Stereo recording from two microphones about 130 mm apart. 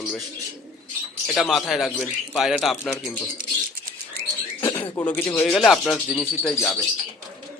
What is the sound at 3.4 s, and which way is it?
Speech, 90° right.